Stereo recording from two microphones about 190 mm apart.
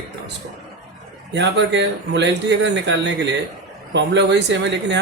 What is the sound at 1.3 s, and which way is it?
Speech, 65° right (ahead or behind).